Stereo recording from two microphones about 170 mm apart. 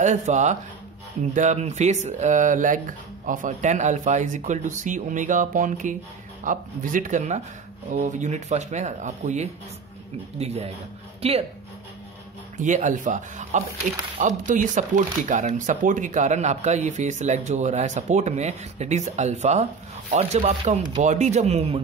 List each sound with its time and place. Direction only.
0.0 s a man's voice: 45° right (ahead or behind)
12.5 s a man's voice: 45° right (ahead or behind)